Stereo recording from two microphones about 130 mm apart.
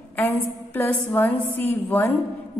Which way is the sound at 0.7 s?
15° left (ahead or behind).